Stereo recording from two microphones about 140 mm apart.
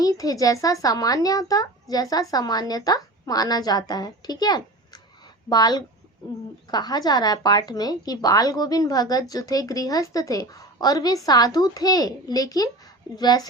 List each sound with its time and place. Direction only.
0.0 s a woman's voice: 25° left (ahead or behind)